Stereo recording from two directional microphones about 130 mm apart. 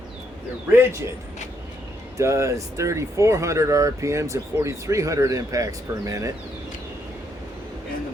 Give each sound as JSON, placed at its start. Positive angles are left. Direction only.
{"t": 0.7, "sound": "speech", "side_deg": -20}
{"t": 2.1, "sound": "speech", "side_deg": -25}